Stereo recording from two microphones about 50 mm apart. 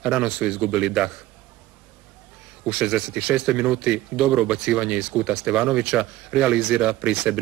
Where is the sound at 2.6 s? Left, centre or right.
Centre.